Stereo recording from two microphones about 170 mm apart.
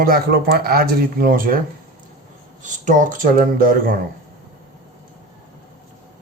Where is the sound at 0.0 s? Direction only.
60° right (ahead or behind).